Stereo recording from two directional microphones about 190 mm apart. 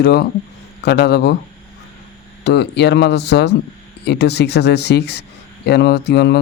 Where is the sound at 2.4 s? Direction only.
65° left (ahead or behind).